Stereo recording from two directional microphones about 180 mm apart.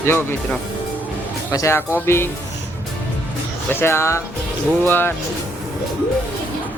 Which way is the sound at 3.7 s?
15° left (ahead or behind).